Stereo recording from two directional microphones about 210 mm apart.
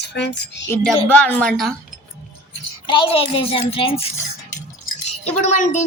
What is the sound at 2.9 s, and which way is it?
Speech, 25° left (ahead or behind).